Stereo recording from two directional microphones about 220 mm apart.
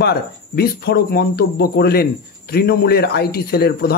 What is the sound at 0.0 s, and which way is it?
A man's voice, 45° left (ahead or behind).